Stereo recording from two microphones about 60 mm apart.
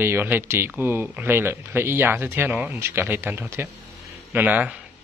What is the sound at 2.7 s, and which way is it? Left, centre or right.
Speech, right.